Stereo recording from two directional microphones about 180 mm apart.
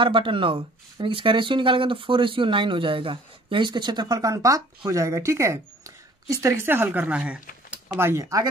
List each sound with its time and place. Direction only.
0.0 s speech: 30° right (ahead or behind)